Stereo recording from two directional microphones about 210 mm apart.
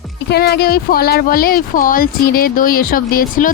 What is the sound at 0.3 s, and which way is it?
Speech, 50° left (ahead or behind).